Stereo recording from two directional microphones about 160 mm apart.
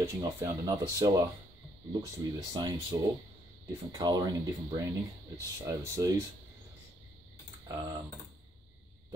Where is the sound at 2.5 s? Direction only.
25° right (ahead or behind).